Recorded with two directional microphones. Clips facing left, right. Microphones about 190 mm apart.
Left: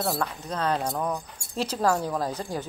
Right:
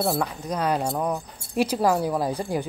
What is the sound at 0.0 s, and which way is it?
Speech, 15° right (ahead or behind).